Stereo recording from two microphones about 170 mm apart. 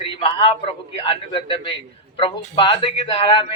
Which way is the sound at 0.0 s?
30° left (ahead or behind).